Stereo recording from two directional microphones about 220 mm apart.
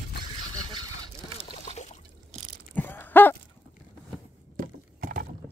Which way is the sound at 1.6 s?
30° left (ahead or behind).